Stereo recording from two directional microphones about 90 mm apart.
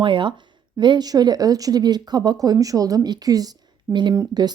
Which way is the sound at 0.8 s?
55° right (ahead or behind).